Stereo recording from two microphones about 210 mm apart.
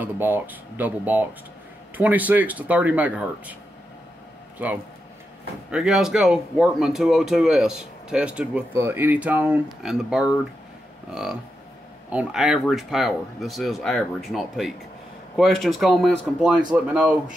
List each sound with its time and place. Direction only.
0.0 s speech: 10° right (ahead or behind)
4.6 s speech: 5° right (ahead or behind)